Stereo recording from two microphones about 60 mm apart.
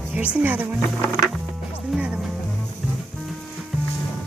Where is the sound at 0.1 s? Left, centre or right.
Right.